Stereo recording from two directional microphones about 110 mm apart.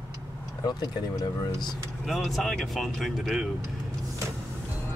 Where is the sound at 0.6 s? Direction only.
35° left (ahead or behind).